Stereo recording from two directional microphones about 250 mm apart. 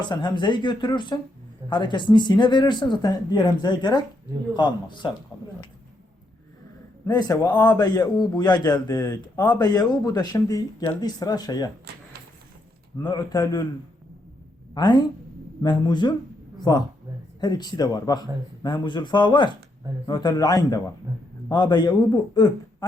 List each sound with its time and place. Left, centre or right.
0.0 s a man's voice: centre
7.0 s a man's voice: centre
13.0 s a man's voice: centre
14.8 s a man's voice: centre